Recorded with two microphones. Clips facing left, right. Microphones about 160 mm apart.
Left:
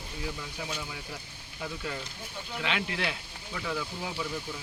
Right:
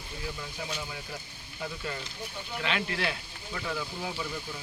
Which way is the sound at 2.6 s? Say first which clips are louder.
Right 1 dB; 15° left (ahead or behind).